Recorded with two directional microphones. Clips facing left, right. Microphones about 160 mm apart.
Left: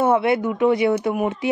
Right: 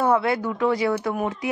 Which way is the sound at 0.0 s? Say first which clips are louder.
Left 3 dB; 25° left (ahead or behind).